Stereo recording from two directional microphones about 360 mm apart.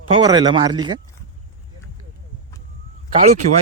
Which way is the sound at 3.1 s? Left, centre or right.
Centre.